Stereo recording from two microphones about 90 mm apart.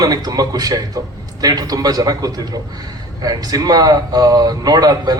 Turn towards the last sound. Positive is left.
turn(degrees=-45)  # may be behind; listen again after turning